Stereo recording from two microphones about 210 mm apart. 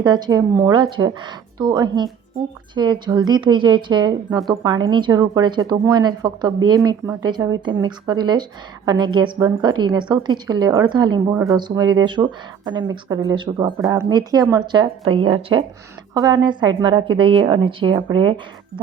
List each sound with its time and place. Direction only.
0.0 s speech: 20° right (ahead or behind)
4.3 s a woman's voice: centre (ahead or behind)
4.6 s speech: 20° right (ahead or behind)